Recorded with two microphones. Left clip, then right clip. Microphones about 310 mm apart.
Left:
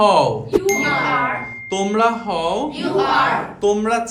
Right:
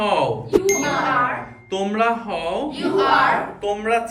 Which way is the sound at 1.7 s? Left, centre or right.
Centre.